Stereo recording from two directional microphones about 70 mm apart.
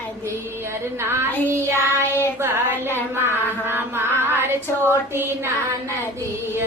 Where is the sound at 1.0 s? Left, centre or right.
Right.